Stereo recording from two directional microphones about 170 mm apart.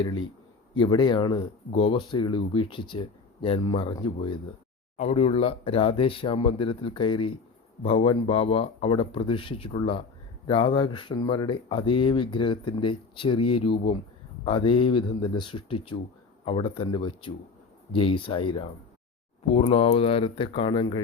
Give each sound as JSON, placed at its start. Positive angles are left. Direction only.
{"t": 0.0, "sound": "speech", "side_deg": 25}